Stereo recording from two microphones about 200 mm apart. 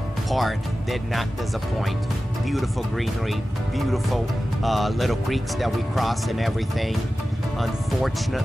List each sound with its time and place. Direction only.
0.3 s speech: centre (ahead or behind)
2.5 s speech: centre (ahead or behind)